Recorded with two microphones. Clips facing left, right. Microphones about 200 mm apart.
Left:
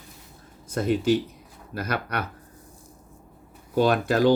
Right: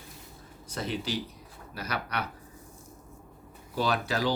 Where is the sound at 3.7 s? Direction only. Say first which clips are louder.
Left 8 dB; 50° left (ahead or behind).